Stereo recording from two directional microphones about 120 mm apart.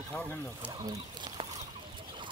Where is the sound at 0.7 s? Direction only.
30° right (ahead or behind).